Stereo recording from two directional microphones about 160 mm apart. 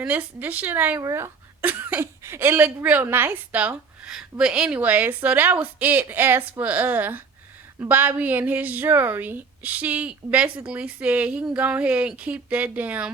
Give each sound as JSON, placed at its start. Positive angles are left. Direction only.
{"t": 0.0, "sound": "speech", "side_deg": -10}